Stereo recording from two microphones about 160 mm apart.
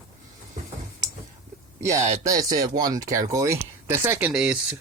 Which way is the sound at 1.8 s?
20° right (ahead or behind).